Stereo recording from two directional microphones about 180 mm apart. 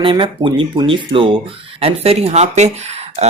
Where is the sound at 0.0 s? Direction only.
25° right (ahead or behind).